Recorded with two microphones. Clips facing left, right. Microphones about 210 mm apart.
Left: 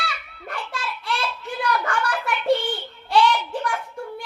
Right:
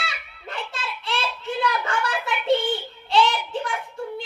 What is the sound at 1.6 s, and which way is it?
Child singing, 25° right (ahead or behind).